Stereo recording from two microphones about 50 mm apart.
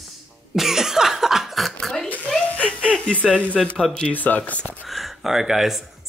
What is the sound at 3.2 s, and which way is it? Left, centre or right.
Speech, left.